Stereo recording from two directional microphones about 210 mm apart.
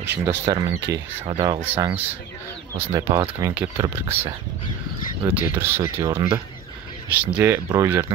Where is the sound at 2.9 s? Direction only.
15° right (ahead or behind).